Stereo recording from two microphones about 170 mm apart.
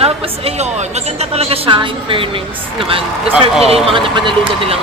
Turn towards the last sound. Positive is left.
turn(degrees=-30)  # may be behind; listen again after turning